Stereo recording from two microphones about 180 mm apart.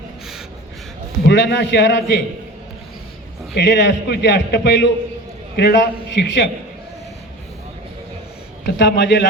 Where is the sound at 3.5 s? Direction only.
70° left (ahead or behind).